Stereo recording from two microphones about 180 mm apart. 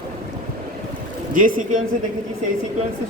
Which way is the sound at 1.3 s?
50° right (ahead or behind).